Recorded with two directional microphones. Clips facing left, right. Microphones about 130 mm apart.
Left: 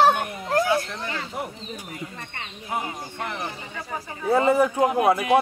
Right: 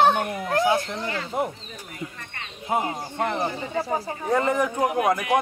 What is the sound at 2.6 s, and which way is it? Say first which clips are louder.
Speech: right 5 dB; 25° right (ahead or behind).